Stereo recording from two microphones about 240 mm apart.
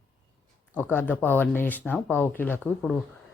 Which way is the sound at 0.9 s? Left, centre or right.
Centre.